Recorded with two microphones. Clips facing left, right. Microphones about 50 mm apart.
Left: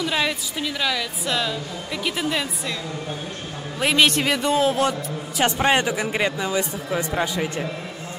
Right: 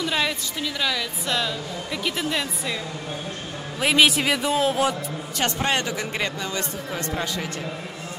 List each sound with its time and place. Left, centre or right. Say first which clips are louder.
0.0 s a woman's voice: left 1 dB; centre
3.8 s a woman's voice: even; centre
5.4 s speech: left 5 dB; centre